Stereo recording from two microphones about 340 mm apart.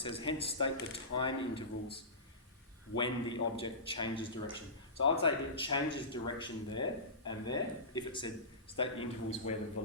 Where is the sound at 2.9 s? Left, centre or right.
Centre.